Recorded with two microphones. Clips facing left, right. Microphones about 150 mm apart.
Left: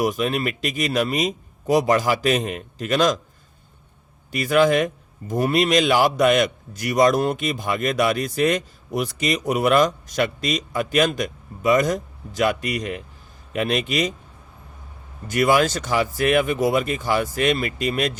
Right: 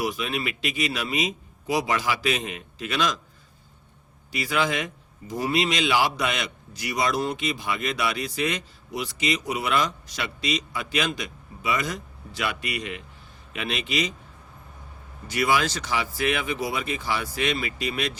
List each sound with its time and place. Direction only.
0.0 s a man's voice: 45° left (ahead or behind)
4.3 s a man's voice: 50° left (ahead or behind)
15.3 s a man's voice: 50° left (ahead or behind)